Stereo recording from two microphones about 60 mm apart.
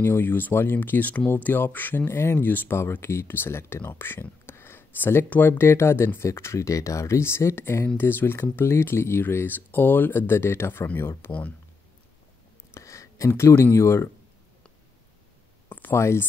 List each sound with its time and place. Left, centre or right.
0.0 s speech: left
2.1 s speech: left
2.4 s speech: left
2.9 s speech: left
12.7 s a sound: left
13.7 s speech: left
15.7 s a sound: left
16.0 s speech: left